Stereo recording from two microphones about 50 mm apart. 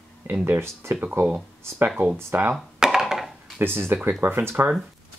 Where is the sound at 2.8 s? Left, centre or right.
Centre.